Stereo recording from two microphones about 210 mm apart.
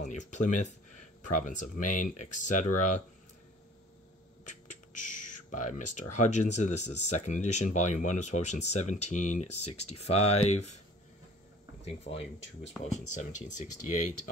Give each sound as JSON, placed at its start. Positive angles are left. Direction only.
{"t": 0.0, "sound": "speech", "side_deg": 35}
{"t": 4.5, "sound": "speech", "side_deg": 35}
{"t": 11.8, "sound": "speech", "side_deg": 30}